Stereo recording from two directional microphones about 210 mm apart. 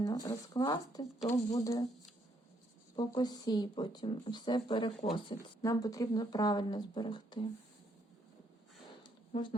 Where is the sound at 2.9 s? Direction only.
20° left (ahead or behind).